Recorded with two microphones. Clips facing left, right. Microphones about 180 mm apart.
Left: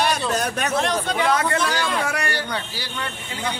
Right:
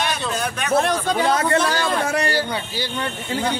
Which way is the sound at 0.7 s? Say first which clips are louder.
Right 7 dB; 35° right (ahead or behind).